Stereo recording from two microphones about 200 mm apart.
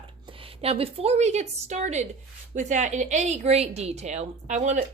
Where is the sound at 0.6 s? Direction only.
30° right (ahead or behind).